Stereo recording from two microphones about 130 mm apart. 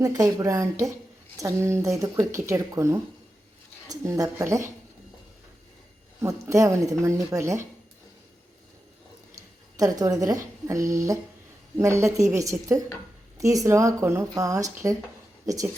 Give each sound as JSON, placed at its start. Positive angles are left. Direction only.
{"t": 0.0, "sound": "speech", "side_deg": -25}
{"t": 6.2, "sound": "speech", "side_deg": -25}
{"t": 9.7, "sound": "speech", "side_deg": -30}